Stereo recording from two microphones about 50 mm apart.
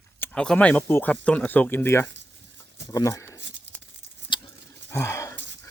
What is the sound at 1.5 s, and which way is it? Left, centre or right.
Speech, left.